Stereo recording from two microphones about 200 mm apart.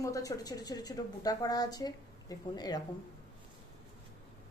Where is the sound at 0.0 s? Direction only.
15° left (ahead or behind).